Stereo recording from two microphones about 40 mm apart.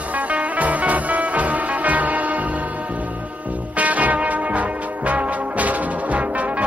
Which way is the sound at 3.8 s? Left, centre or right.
Right.